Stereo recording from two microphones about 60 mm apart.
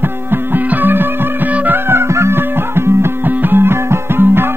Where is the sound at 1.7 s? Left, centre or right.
Right.